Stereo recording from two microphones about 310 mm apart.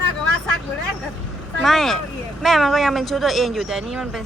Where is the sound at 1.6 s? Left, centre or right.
Centre.